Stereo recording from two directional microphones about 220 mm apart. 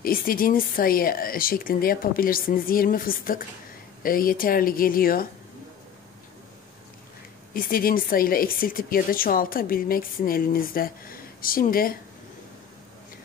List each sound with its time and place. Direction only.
0.0 s speech: 40° left (ahead or behind)
7.5 s speech: 40° left (ahead or behind)